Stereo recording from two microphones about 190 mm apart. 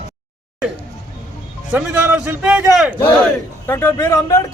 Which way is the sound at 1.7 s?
10° right (ahead or behind).